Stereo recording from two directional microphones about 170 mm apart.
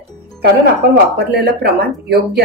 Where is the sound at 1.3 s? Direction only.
70° right (ahead or behind).